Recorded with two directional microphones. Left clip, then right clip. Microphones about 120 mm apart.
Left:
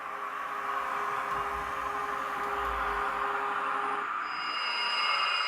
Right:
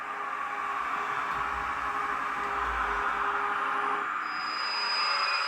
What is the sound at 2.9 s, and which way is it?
Music, 25° left (ahead or behind).